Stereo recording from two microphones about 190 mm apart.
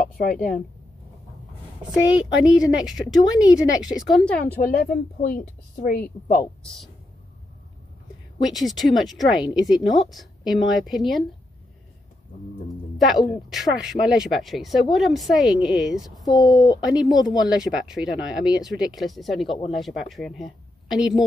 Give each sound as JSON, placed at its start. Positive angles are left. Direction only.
{"t": 0.0, "sound": "speech", "side_deg": 45}
{"t": 2.4, "sound": "speech", "side_deg": -5}
{"t": 4.6, "sound": "speech", "side_deg": 50}
{"t": 6.6, "sound": "speech", "side_deg": 0}
{"t": 8.5, "sound": "speech", "side_deg": 0}
{"t": 12.9, "sound": "music", "side_deg": 0}
{"t": 13.5, "sound": "speech", "side_deg": 0}
{"t": 16.3, "sound": "speech", "side_deg": 20}
{"t": 17.5, "sound": "speech", "side_deg": -5}